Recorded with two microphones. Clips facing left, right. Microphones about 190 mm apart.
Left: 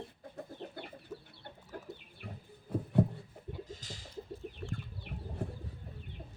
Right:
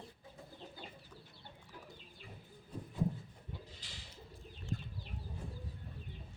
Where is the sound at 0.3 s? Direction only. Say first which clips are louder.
Left 8 dB; 65° left (ahead or behind).